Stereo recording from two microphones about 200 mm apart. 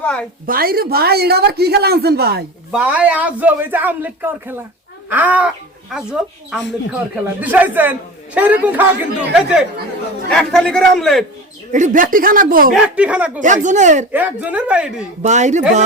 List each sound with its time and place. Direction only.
0.0 s a woman's voice: 5° left (ahead or behind)
0.4 s a woman's voice: 45° right (ahead or behind)
2.7 s a man's voice: 5° right (ahead or behind)
11.7 s a woman's voice: 40° right (ahead or behind)
12.7 s a man's voice: 5° right (ahead or behind)
13.4 s speech: 40° right (ahead or behind)
14.1 s a man's voice: 10° right (ahead or behind)
15.2 s speech: 35° right (ahead or behind)